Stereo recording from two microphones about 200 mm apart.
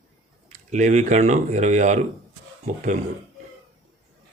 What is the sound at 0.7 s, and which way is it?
Speech, 35° right (ahead or behind).